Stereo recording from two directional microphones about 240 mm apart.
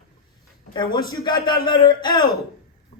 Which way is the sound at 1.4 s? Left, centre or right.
Centre.